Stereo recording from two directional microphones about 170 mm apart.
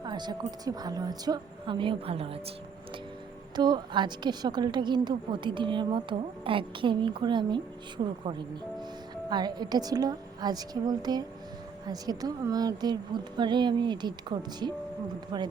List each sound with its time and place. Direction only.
0.0 s a woman's voice: 25° right (ahead or behind)
3.5 s a woman's voice: 25° right (ahead or behind)
9.3 s a woman's voice: 25° right (ahead or behind)